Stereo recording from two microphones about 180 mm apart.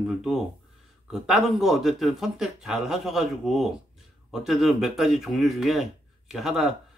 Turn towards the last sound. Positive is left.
turn(degrees=0)  # may be behind; listen again after turning